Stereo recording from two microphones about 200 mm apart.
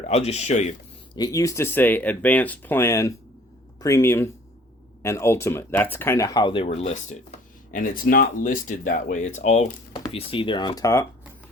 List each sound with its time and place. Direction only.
0.1 s speech: 30° left (ahead or behind)
1.1 s speech: 20° left (ahead or behind); by 9.7 s 35° left (ahead or behind)
9.9 s speech: 25° left (ahead or behind)